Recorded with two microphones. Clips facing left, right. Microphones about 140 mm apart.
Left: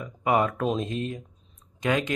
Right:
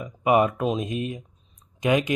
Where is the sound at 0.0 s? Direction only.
15° right (ahead or behind).